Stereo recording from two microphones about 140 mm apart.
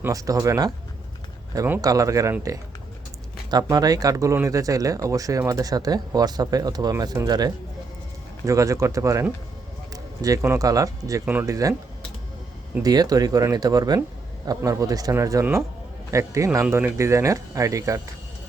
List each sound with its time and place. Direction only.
0.0 s speech: 25° right (ahead or behind)
3.5 s speech: 25° right (ahead or behind)
9.9 s a sound: 25° right (ahead or behind)
10.4 s speech: 20° right (ahead or behind)
12.8 s speech: 25° right (ahead or behind)